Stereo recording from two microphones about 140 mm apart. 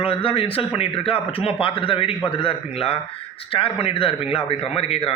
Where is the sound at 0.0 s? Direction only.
40° left (ahead or behind).